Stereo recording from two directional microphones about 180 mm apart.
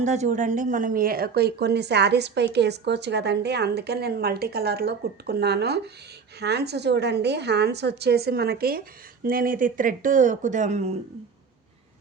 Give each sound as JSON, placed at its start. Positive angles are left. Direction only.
{"t": 0.0, "sound": "speech", "side_deg": -40}